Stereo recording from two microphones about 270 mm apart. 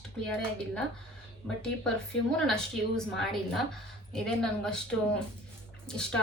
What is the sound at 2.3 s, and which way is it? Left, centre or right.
A woman's voice, centre.